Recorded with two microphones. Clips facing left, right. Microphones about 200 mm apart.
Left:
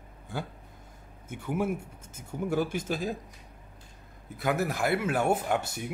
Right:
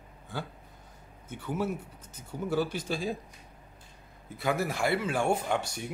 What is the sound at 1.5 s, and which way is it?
Speech, 10° left (ahead or behind).